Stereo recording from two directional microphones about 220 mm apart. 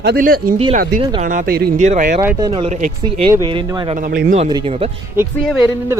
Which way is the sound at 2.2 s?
15° right (ahead or behind).